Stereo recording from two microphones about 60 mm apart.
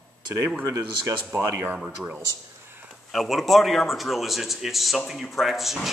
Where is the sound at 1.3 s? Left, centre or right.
Right.